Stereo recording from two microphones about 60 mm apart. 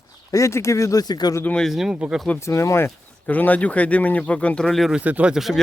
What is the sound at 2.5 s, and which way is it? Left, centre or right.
Speech, left.